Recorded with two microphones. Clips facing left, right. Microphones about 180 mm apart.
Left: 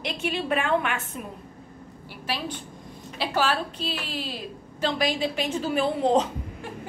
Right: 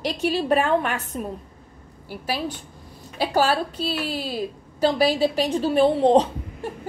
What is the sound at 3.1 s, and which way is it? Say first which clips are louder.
A woman's voice: right 5 dB; 40° right (ahead or behind).